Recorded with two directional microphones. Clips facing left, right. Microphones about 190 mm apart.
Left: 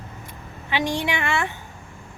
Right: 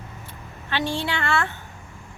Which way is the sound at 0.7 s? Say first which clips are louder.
Left 2 dB; 15° left (ahead or behind).